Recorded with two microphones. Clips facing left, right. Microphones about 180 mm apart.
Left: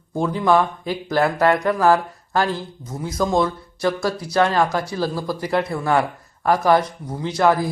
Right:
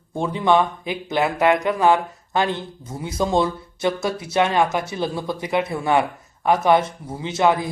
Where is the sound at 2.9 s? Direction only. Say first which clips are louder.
Left 2 dB; 10° right (ahead or behind).